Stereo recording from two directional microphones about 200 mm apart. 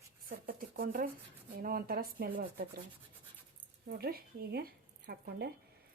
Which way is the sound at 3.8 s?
50° right (ahead or behind).